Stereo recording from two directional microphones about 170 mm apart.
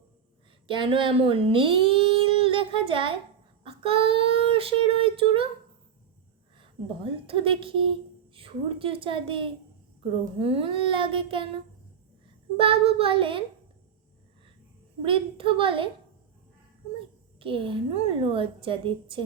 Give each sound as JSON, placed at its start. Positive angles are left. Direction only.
{"t": 0.7, "sound": "speech", "side_deg": -30}
{"t": 6.6, "sound": "speech", "side_deg": -30}
{"t": 12.5, "sound": "speech", "side_deg": -30}
{"t": 15.0, "sound": "speech", "side_deg": -30}
{"t": 17.4, "sound": "speech", "side_deg": -30}